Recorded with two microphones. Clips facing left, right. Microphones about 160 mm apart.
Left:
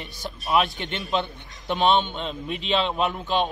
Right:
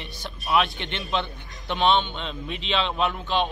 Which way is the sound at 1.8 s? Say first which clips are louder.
Left 1 dB; 45° left (ahead or behind).